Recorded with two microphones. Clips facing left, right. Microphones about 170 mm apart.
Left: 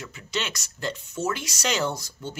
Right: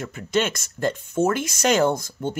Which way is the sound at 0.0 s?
50° right (ahead or behind).